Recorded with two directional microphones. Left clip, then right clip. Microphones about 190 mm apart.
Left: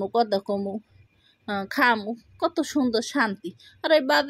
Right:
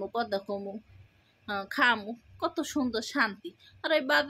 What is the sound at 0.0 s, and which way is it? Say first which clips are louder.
A woman's voice: left 8 dB; 35° left (ahead or behind).